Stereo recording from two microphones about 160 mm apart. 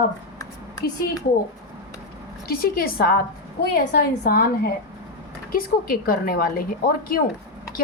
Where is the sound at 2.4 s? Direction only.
70° left (ahead or behind).